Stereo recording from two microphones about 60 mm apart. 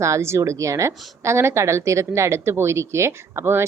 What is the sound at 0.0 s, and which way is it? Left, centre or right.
Speech, right.